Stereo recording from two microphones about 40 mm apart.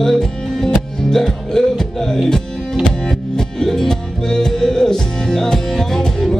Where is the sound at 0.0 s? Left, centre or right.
Centre.